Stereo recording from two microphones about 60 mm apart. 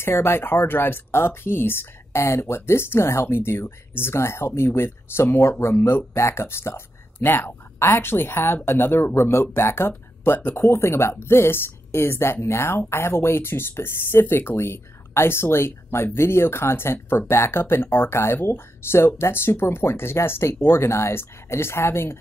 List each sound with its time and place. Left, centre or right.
0.0 s speech: left